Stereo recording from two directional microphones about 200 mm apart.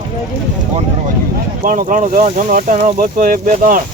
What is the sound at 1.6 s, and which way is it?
Speech, 40° right (ahead or behind).